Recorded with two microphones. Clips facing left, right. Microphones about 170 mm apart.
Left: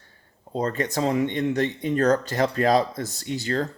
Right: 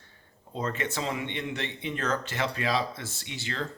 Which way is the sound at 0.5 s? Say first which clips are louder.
Left 6 dB; 40° left (ahead or behind).